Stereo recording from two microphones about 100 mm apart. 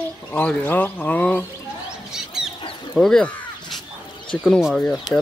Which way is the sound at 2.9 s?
5° left (ahead or behind).